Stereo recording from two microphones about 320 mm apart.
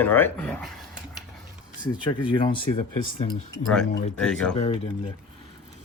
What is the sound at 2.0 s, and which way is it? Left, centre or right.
Speech, centre.